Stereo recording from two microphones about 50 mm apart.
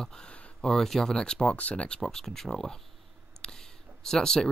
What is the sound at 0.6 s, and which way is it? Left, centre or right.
Speech, centre.